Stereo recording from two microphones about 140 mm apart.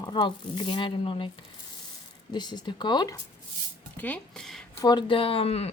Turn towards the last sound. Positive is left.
turn(degrees=45)  # may be behind; listen again after turning